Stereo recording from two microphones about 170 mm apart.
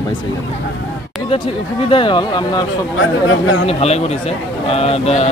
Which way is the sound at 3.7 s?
40° left (ahead or behind).